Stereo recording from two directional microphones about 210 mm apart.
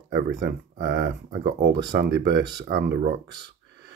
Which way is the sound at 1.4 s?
50° right (ahead or behind).